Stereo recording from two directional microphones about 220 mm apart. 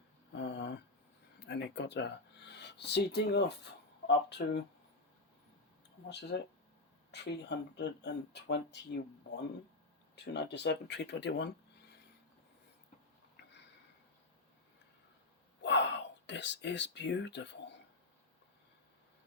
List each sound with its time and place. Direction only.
0.3 s a sound: 55° left (ahead or behind)
1.5 s speech: 50° left (ahead or behind)
6.1 s speech: 50° left (ahead or behind)
10.3 s speech: 50° left (ahead or behind)
15.6 s speech: 55° left (ahead or behind)